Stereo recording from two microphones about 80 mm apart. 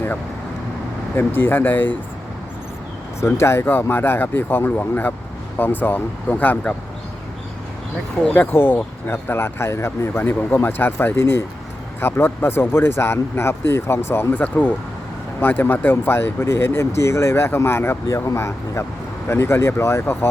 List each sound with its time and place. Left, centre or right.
1.1 s speech: left
3.2 s speech: left
8.2 s speech: centre; by 10.1 s left
10.2 s speech: left
14.3 s speech: centre